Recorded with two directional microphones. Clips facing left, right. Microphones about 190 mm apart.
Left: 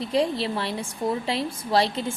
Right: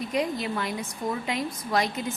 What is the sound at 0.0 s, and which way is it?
A woman's voice, 30° left (ahead or behind).